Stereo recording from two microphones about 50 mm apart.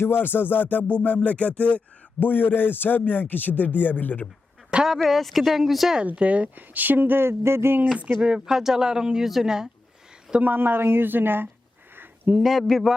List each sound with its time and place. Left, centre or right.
0.0 s a man's voice: left
2.1 s a man's voice: left
4.7 s speech: right
5.0 s speech: centre
6.1 s speech: right
8.2 s speech: centre
8.5 s speech: centre
10.4 s a woman's voice: right
12.4 s speech: centre